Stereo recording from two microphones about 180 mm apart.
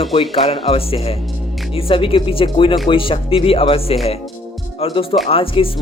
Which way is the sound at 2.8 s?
30° left (ahead or behind).